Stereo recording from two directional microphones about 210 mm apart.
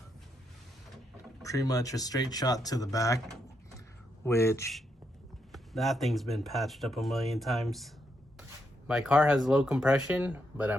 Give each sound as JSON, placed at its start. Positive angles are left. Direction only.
{"t": 1.5, "sound": "speech", "side_deg": 15}
{"t": 4.3, "sound": "speech", "side_deg": 10}
{"t": 5.5, "sound": "speech", "side_deg": 0}